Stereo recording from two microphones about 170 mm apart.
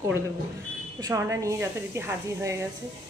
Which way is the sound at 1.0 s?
20° right (ahead or behind).